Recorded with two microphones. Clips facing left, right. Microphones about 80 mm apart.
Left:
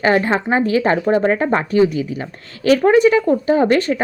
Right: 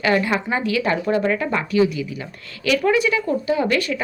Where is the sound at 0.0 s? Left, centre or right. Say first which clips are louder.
Left 4 dB; left.